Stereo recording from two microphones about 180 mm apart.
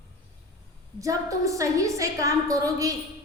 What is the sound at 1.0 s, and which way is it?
A woman's voice, 20° right (ahead or behind).